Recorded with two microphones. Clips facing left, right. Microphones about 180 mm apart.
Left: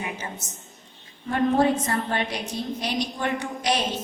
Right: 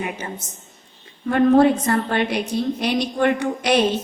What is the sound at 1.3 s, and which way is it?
A woman's voice, 70° right (ahead or behind).